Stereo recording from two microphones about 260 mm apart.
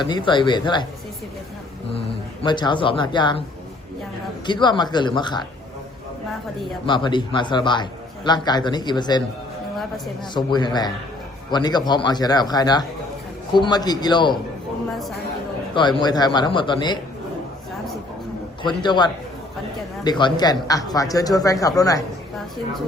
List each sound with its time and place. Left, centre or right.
0.0 s a man's voice: centre
2.4 s a man's voice: centre
4.4 s a man's voice: centre
6.8 s a man's voice: centre
10.3 s a man's voice: centre
15.7 s a man's voice: centre
18.6 s a man's voice: centre